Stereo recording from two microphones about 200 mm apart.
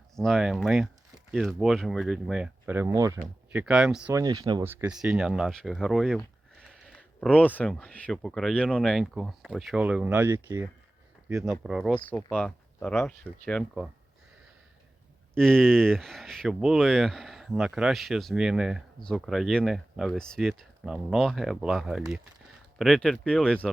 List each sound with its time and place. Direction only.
0.2 s speech: centre (ahead or behind); by 3.2 s 15° right (ahead or behind)
3.5 s speech: 5° right (ahead or behind)
4.1 s speech: 20° right (ahead or behind)
4.7 s speech: 5° right (ahead or behind)
11.5 s speech: centre (ahead or behind)
15.4 s speech: 5° left (ahead or behind)